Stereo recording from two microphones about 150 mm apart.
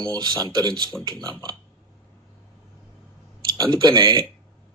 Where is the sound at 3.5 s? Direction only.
30° right (ahead or behind).